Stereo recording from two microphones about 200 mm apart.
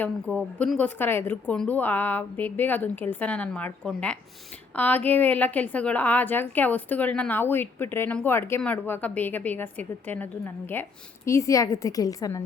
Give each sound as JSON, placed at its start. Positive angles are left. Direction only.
{"t": 0.0, "sound": "a woman's voice", "side_deg": 5}